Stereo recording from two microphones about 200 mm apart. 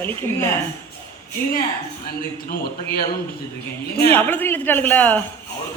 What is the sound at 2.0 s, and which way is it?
Speech, 50° left (ahead or behind).